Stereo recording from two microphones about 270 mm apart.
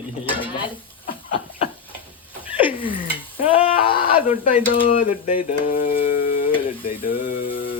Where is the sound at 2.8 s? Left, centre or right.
Centre.